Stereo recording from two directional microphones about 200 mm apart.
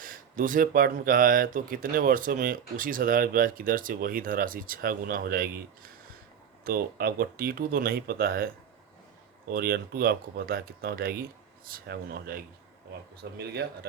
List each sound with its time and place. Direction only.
0.0 s speech: 45° right (ahead or behind)
6.7 s speech: 50° right (ahead or behind)
9.5 s speech: 50° right (ahead or behind)